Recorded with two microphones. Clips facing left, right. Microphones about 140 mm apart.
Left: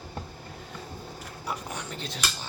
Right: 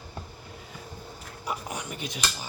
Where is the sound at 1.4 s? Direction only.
15° right (ahead or behind).